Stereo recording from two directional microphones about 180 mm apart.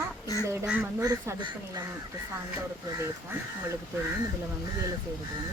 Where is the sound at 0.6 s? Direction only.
10° right (ahead or behind).